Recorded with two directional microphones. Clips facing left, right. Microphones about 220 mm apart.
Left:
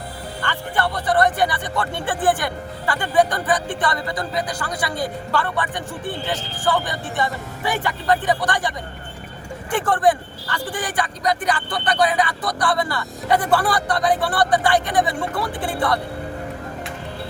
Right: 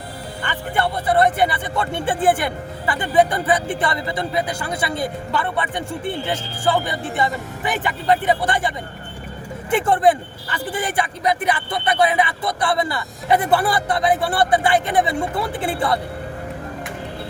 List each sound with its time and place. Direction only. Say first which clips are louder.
0.4 s music: right 1 dB; 20° right (ahead or behind)
1.0 s speech: right 2 dB; 25° right (ahead or behind)
9.7 s speech: right 2 dB; 25° right (ahead or behind)